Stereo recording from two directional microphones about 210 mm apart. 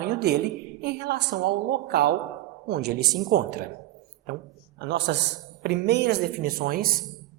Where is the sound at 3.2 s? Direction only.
40° right (ahead or behind).